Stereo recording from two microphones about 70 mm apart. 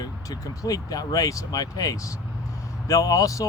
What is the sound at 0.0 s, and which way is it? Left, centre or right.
Speech, left.